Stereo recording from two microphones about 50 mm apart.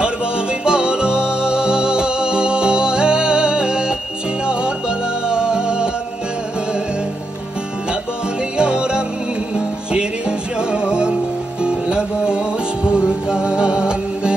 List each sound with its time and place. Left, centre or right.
0.0 s music: centre
8.5 s music: centre